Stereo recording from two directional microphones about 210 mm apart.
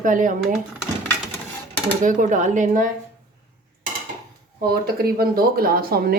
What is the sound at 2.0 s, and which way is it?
Speech, 35° right (ahead or behind).